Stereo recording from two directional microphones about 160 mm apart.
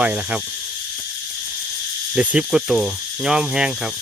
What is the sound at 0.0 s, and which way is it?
Speech, 5° right (ahead or behind).